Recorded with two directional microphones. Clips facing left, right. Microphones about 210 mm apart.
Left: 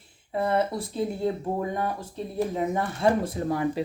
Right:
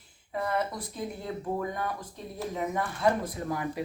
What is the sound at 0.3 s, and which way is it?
Speech, 30° left (ahead or behind).